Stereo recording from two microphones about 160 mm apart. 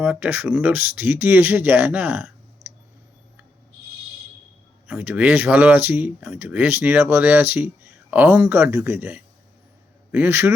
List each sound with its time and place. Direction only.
0.0 s speech: 10° right (ahead or behind)
2.6 s clicking: 90° right
4.9 s a man's voice: 10° right (ahead or behind)